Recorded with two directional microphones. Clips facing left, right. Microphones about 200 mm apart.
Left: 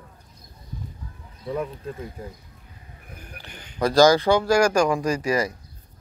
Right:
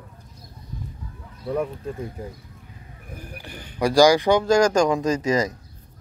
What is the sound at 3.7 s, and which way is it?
Speech, 15° right (ahead or behind).